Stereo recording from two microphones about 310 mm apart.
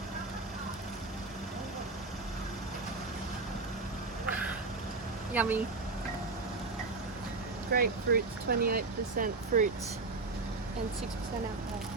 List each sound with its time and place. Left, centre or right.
5.3 s speech: centre
7.7 s speech: right